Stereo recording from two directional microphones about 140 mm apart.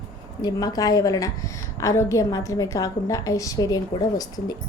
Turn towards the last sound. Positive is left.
turn(degrees=30)  # may be behind; listen again after turning